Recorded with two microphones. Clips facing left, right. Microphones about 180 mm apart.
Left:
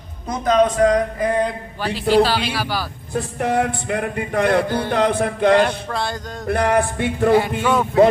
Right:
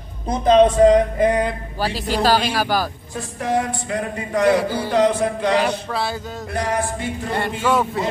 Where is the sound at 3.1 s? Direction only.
60° left (ahead or behind).